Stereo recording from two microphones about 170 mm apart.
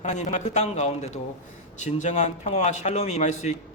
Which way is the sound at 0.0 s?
45° left (ahead or behind).